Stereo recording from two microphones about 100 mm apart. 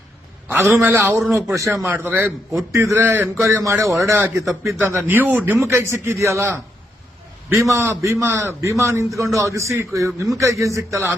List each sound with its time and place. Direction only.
0.4 s a man's voice: 25° right (ahead or behind)
2.0 s a man's voice: 20° right (ahead or behind)
7.6 s a man's voice: 30° right (ahead or behind)